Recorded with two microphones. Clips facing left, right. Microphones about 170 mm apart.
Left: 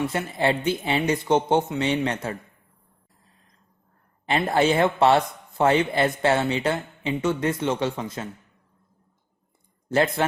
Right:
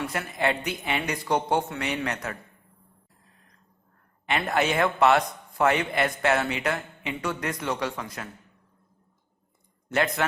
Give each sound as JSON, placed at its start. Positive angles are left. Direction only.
{"t": 0.0, "sound": "speech", "side_deg": 25}
{"t": 4.3, "sound": "speech", "side_deg": 30}
{"t": 9.9, "sound": "speech", "side_deg": 30}